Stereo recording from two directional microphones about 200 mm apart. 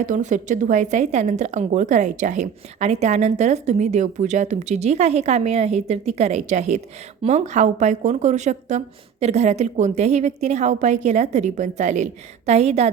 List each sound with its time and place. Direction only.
0.0 s a woman's voice: 40° right (ahead or behind)